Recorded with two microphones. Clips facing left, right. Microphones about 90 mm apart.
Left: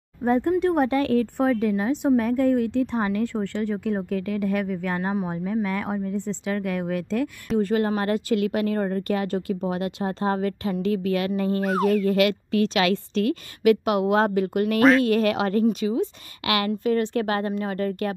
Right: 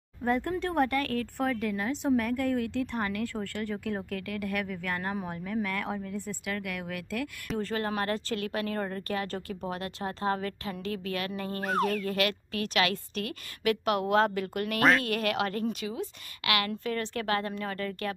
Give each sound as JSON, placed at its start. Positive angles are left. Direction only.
{"t": 0.2, "sound": "speech", "side_deg": 20}
{"t": 14.8, "sound": "speech", "side_deg": 0}
{"t": 15.0, "sound": "speech", "side_deg": 25}